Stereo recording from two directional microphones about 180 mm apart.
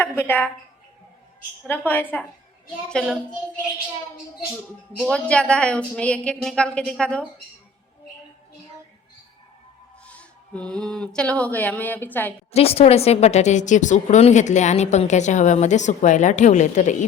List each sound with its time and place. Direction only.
0.0 s a woman's voice: 10° left (ahead or behind)
1.6 s a woman's voice: 10° left (ahead or behind)
4.9 s speech: 5° left (ahead or behind)
10.1 s speech: 5° left (ahead or behind)
12.5 s a woman's voice: 35° left (ahead or behind)